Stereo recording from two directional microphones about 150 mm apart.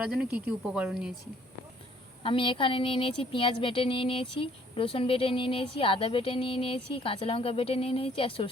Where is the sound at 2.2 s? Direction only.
35° left (ahead or behind).